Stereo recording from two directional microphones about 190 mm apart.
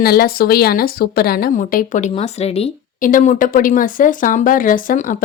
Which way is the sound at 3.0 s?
45° left (ahead or behind).